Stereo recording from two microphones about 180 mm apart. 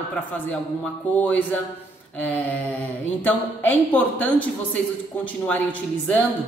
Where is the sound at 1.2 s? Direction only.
10° left (ahead or behind).